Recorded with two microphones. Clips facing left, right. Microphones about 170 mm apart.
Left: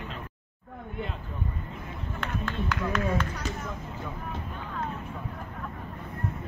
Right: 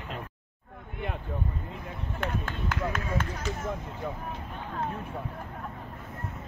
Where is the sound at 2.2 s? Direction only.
50° right (ahead or behind).